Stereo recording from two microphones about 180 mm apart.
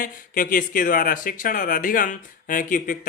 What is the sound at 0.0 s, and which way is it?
Speech, 50° left (ahead or behind).